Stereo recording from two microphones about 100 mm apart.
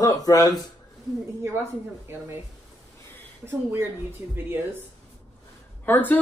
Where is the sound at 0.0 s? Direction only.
35° left (ahead or behind).